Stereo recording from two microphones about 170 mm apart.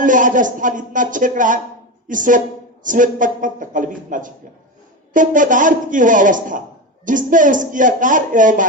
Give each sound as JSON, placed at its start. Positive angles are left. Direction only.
{"t": 0.0, "sound": "speech", "side_deg": -50}